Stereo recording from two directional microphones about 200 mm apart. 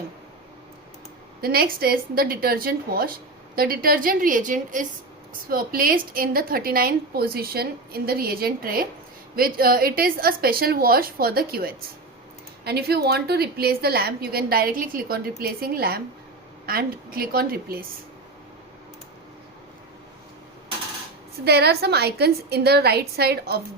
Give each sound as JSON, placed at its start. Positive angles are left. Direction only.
{"t": 1.4, "sound": "a woman's voice", "side_deg": -50}
{"t": 21.4, "sound": "a woman's voice", "side_deg": -55}